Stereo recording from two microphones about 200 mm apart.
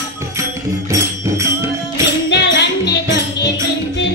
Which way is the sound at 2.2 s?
60° left (ahead or behind).